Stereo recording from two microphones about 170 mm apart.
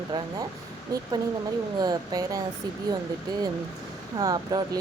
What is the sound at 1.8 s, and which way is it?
Speech, 25° right (ahead or behind).